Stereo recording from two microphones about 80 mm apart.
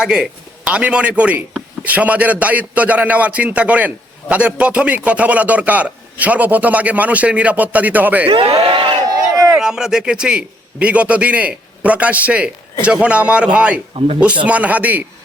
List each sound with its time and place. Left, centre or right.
0.0 s a man's voice: centre
9.5 s a man's voice: centre